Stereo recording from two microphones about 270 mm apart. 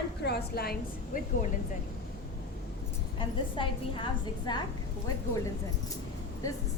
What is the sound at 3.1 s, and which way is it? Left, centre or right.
A woman's voice, centre.